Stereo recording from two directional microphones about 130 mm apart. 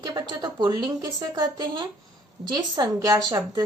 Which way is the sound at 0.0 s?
30° right (ahead or behind).